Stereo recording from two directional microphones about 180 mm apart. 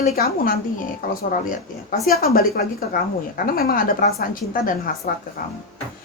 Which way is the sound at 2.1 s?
55° left (ahead or behind).